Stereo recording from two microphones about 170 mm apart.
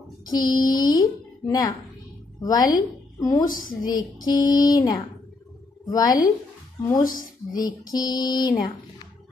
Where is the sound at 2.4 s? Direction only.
20° left (ahead or behind).